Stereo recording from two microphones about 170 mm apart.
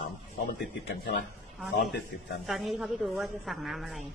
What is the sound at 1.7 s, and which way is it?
Speech, 75° left (ahead or behind).